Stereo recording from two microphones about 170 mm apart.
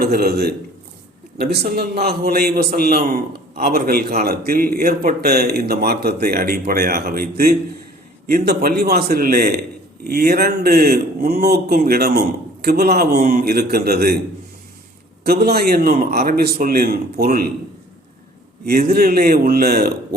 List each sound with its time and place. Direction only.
0.0 s a man's voice: 65° right (ahead or behind)
15.2 s a man's voice: 65° right (ahead or behind)
18.6 s a man's voice: 60° right (ahead or behind)